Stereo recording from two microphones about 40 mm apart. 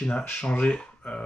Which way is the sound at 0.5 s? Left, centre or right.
Left.